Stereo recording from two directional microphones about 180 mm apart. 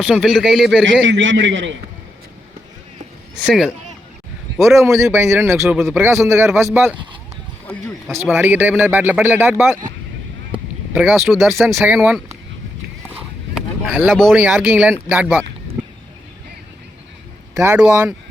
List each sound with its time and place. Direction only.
0.1 s speech: centre (ahead or behind)
1.0 s a man's voice: 90° right
4.9 s speech: 15° right (ahead or behind)
5.5 s speech: centre (ahead or behind)
6.9 s speech: 25° right (ahead or behind)
8.1 s speech: 10° right (ahead or behind)
10.9 s speech: 5° right (ahead or behind)
13.1 s a sound: 5° right (ahead or behind)
15.1 s speech: 10° right (ahead or behind)
17.6 s speech: 10° right (ahead or behind)